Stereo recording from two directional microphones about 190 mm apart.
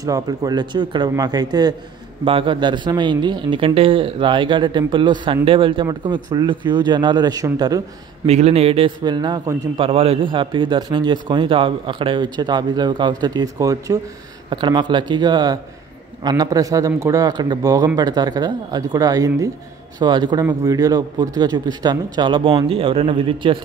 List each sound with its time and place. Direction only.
0.0 s a man's voice: 20° right (ahead or behind)
8.3 s a man's voice: 35° right (ahead or behind)